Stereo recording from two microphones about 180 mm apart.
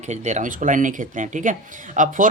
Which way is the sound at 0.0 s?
40° right (ahead or behind).